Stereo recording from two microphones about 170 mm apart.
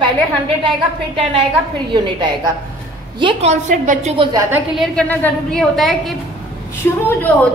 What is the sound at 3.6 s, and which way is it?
Speech, 50° right (ahead or behind).